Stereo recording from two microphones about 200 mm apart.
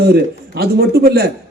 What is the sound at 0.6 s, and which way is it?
Speech, 50° right (ahead or behind).